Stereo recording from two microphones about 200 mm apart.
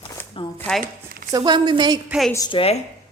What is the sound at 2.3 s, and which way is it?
Speech, 20° left (ahead or behind).